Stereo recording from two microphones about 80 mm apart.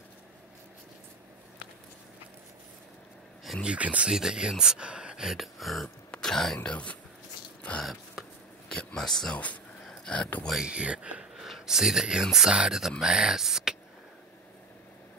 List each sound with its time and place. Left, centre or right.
3.6 s speech: centre
6.7 s speech: centre
7.8 s a sound: centre
8.7 s speech: centre
9.8 s a sound: centre
10.6 s speech: centre
11.4 s speech: centre